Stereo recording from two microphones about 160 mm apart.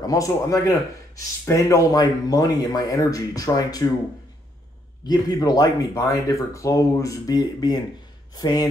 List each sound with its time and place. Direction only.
0.0 s a man's voice: 20° left (ahead or behind)
5.0 s a man's voice: 25° left (ahead or behind)